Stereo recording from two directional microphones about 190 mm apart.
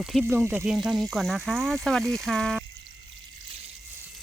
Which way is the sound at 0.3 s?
10° right (ahead or behind).